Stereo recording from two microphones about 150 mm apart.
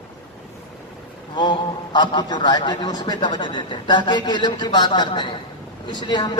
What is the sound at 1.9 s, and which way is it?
A man's voice, 30° left (ahead or behind).